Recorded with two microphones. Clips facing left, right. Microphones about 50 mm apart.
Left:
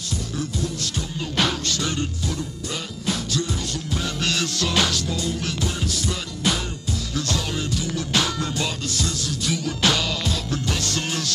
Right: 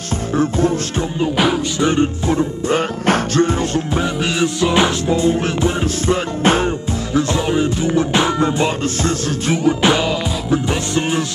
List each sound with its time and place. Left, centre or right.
0.4 s music: right
1.2 s music: centre; by 4.0 s right
4.0 s music: centre; by 6.7 s right
7.2 s music: right